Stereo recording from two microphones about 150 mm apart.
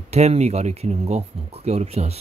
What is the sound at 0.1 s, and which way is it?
Speech, 45° right (ahead or behind).